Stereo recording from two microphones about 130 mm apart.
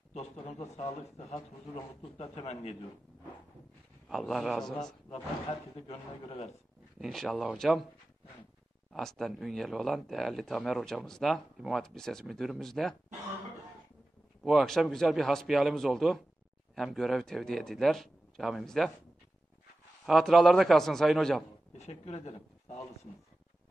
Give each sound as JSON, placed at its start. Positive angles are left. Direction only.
{"t": 0.7, "sound": "a man's voice", "side_deg": 55}
{"t": 4.1, "sound": "speech", "side_deg": 0}
{"t": 5.1, "sound": "a man's voice", "side_deg": 50}
{"t": 7.0, "sound": "speech", "side_deg": 0}
{"t": 8.9, "sound": "speech", "side_deg": 0}
{"t": 14.4, "sound": "speech", "side_deg": 0}
{"t": 20.1, "sound": "speech", "side_deg": 0}
{"t": 21.7, "sound": "a woman's voice", "side_deg": 60}